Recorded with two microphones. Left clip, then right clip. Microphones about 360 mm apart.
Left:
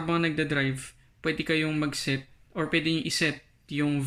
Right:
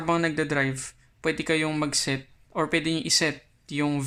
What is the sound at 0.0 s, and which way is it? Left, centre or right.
Speech, centre.